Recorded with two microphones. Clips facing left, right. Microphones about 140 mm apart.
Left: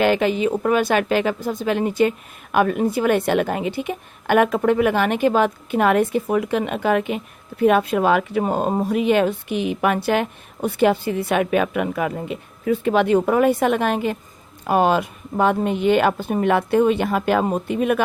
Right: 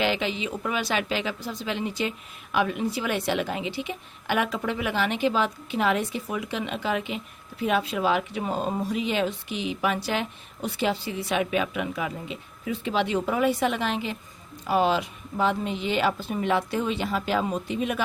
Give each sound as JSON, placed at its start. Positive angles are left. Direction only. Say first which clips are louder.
{"t": 0.0, "sound": "a woman's voice", "louder": "left 9 dB", "side_deg": 50}